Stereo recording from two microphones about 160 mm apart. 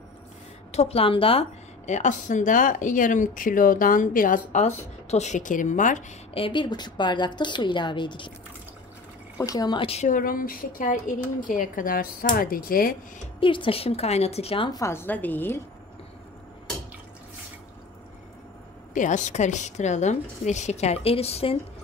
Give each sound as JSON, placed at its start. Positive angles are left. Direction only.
{"t": 0.7, "sound": "a woman's voice", "side_deg": 40}
{"t": 6.3, "sound": "a woman's voice", "side_deg": 30}
{"t": 9.5, "sound": "a woman's voice", "side_deg": 25}
{"t": 10.1, "sound": "speech", "side_deg": 60}
{"t": 13.4, "sound": "a woman's voice", "side_deg": 30}
{"t": 14.7, "sound": "a woman's voice", "side_deg": 20}
{"t": 18.9, "sound": "a woman's voice", "side_deg": 50}